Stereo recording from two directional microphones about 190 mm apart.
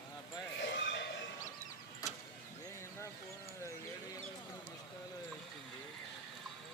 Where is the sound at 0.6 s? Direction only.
60° left (ahead or behind).